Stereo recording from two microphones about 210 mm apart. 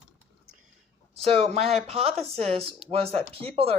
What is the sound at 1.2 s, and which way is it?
Speech, 30° right (ahead or behind).